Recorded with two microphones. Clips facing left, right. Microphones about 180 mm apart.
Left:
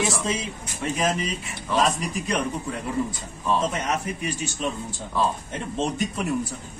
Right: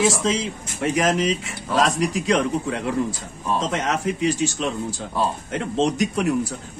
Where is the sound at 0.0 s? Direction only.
90° right.